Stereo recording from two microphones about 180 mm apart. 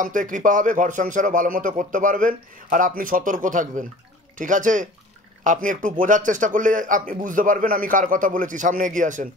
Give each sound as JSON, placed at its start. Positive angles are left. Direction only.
{"t": 0.0, "sound": "a man's voice", "side_deg": -45}